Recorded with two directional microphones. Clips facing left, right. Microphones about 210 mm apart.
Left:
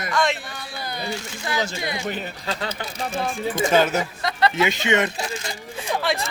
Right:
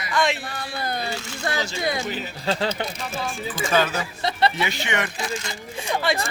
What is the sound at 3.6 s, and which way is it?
Speech, 20° left (ahead or behind).